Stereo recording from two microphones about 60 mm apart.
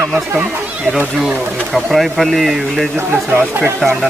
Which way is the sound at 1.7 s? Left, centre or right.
Centre.